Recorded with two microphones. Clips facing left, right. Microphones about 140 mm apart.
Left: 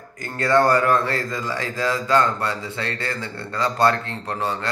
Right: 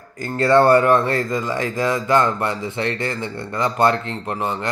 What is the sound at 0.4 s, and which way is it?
A man's voice, 25° right (ahead or behind).